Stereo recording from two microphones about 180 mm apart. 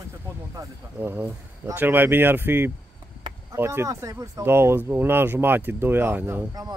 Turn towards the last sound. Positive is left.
turn(degrees=-20)  # may be behind; listen again after turning